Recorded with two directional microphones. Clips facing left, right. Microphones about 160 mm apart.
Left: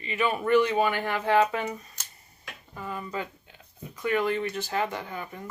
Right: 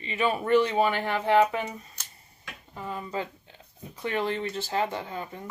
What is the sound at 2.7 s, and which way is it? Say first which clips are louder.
Speech: right 1 dB; 25° right (ahead or behind).